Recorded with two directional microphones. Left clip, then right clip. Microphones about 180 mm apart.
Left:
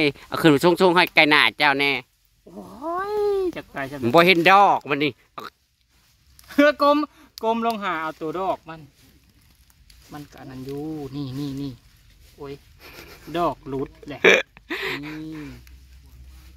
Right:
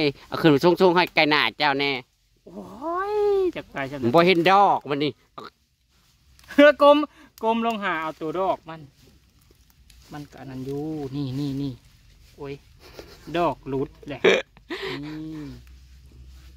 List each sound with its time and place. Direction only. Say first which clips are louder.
0.0 s speech: left 2 dB; centre (ahead or behind)
6.5 s speech: right 3 dB; 10° right (ahead or behind)
10.1 s a sound: right 1 dB; 20° right (ahead or behind)
12.4 s speech: right 1 dB; 15° right (ahead or behind)
12.8 s speech: left 1 dB; centre (ahead or behind)